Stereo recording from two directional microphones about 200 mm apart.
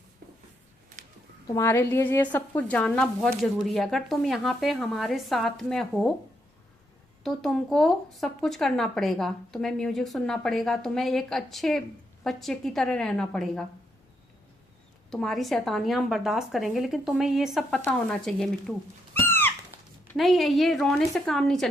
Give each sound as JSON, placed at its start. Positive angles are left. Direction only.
{"t": 1.0, "sound": "a sound", "side_deg": -40}
{"t": 1.5, "sound": "a woman's voice", "side_deg": 15}
{"t": 7.3, "sound": "a woman's voice", "side_deg": 0}
{"t": 15.1, "sound": "a woman's voice", "side_deg": 0}
{"t": 19.3, "sound": "a sound", "side_deg": 10}
{"t": 20.1, "sound": "a woman's voice", "side_deg": 0}